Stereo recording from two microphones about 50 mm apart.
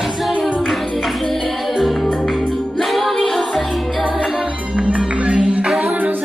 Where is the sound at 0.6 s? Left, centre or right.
Centre.